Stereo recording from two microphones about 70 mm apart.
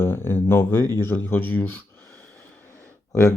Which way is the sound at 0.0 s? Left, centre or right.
Left.